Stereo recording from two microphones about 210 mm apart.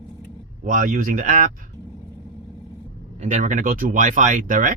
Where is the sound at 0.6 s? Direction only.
40° right (ahead or behind).